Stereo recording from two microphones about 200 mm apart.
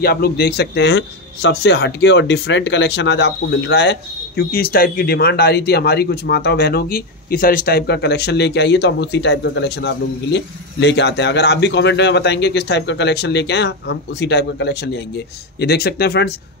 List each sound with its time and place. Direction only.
0.0 s a man's voice: 50° left (ahead or behind)